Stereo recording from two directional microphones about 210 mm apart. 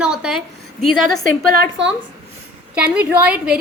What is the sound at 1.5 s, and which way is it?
Speech, 50° right (ahead or behind).